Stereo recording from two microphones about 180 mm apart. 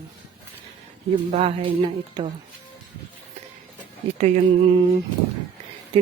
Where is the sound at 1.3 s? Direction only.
35° right (ahead or behind).